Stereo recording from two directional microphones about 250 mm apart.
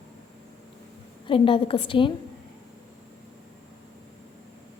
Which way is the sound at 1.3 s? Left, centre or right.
Left.